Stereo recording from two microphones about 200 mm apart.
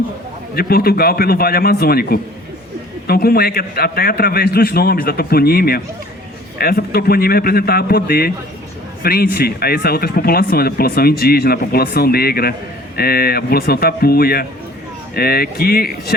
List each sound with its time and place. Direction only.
0.5 s speech: 50° left (ahead or behind)